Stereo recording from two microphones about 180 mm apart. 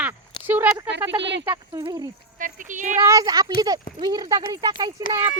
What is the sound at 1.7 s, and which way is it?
Speech, 25° right (ahead or behind).